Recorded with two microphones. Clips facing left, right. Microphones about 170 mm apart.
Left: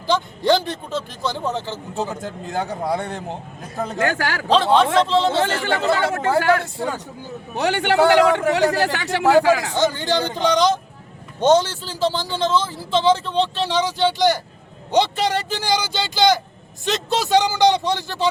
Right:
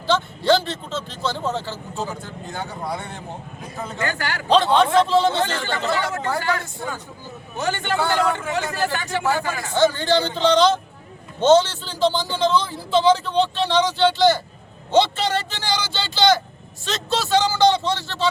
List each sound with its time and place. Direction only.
0.1 s a man's voice: 15° left (ahead or behind)
3.9 s a man's voice: 55° left (ahead or behind)
4.4 s a man's voice: centre (ahead or behind)
5.6 s speech: 60° left (ahead or behind)
6.8 s a man's voice: 75° left (ahead or behind)
9.7 s a man's voice: 15° left (ahead or behind)